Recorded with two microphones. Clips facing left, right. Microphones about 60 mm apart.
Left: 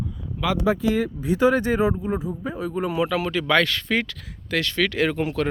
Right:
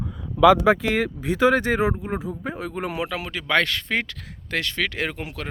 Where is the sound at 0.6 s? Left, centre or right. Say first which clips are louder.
Right 2 dB; right.